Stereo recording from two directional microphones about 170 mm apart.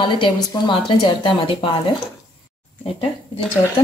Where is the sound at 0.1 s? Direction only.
30° left (ahead or behind).